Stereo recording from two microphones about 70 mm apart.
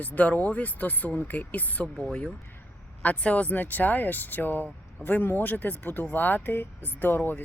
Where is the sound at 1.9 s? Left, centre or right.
Centre.